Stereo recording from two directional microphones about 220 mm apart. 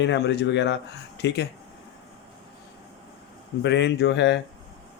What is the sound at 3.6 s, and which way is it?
Speech, 50° left (ahead or behind).